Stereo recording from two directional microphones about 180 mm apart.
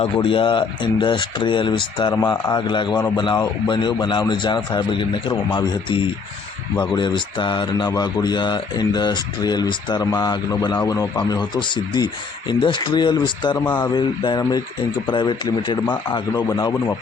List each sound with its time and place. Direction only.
0.0 s speech: 30° left (ahead or behind)